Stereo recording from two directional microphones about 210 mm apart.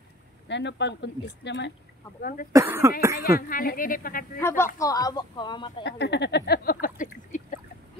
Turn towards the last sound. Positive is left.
turn(degrees=40)  # may be behind; listen again after turning